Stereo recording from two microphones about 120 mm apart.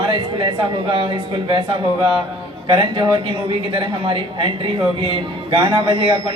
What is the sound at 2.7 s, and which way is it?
Speech, 50° right (ahead or behind).